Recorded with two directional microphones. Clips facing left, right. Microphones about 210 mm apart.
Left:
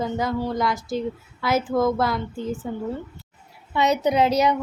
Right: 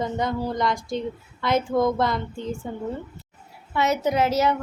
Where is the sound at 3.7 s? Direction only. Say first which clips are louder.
Left 2 dB; 15° left (ahead or behind).